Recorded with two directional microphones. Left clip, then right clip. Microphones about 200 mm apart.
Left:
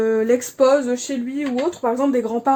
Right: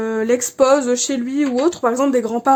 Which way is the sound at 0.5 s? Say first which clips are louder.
Right 3 dB; 35° right (ahead or behind).